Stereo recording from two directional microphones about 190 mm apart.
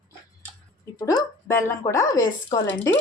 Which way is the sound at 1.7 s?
15° left (ahead or behind).